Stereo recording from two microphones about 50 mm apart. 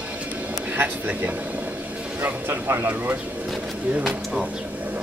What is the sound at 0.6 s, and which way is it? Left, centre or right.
Speech, right.